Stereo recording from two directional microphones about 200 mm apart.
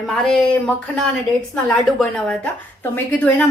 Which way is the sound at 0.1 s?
Centre (ahead or behind).